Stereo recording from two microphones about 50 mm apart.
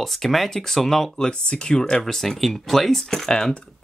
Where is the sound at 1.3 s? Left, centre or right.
Centre.